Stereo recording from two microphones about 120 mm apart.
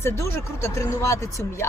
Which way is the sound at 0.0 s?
20° left (ahead or behind).